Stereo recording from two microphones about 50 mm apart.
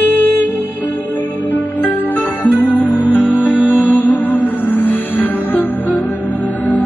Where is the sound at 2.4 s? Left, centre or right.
Left.